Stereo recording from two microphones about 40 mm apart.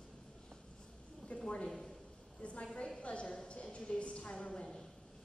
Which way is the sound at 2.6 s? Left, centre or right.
Left.